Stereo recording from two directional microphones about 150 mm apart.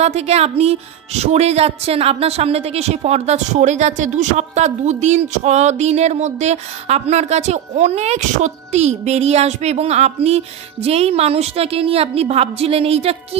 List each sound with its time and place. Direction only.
0.0 s speech: 45° right (ahead or behind)